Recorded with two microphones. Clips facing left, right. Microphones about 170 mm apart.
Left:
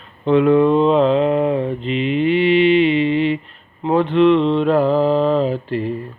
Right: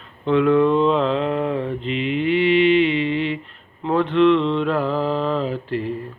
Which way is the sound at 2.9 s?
20° left (ahead or behind).